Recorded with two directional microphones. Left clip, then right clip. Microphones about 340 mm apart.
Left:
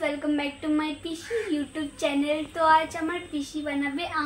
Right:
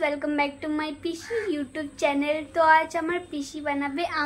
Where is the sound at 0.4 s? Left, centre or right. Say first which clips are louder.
Right 1 dB; centre.